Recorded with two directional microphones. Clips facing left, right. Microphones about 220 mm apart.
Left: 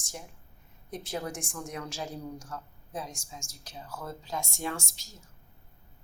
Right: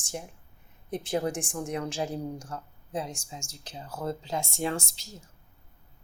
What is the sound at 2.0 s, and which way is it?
Speech, 30° right (ahead or behind).